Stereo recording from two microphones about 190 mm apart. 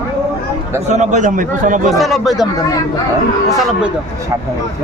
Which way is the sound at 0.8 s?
40° right (ahead or behind).